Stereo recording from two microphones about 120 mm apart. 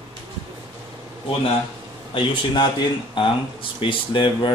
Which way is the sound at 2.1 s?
45° left (ahead or behind).